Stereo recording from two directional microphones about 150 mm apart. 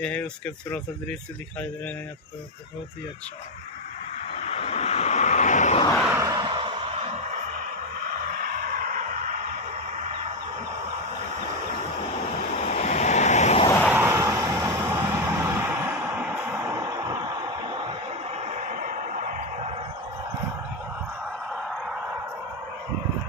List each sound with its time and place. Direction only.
0.0 s speech: 10° left (ahead or behind)
4.4 s vehicle: 45° left (ahead or behind)
6.1 s music: 25° right (ahead or behind); by 7.6 s 50° right (ahead or behind)
8.1 s vehicle: 60° right (ahead or behind)
12.7 s waves: 50° left (ahead or behind)
13.8 s vehicle: 15° right (ahead or behind)
17.6 s a sound: 35° right (ahead or behind)
18.3 s vehicle: 55° right (ahead or behind)
21.5 s a sound: centre (ahead or behind)